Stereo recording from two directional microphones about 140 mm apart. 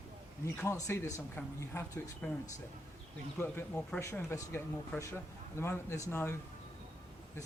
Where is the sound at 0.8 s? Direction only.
20° left (ahead or behind).